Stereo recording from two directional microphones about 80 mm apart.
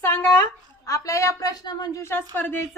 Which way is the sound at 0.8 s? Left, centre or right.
Left.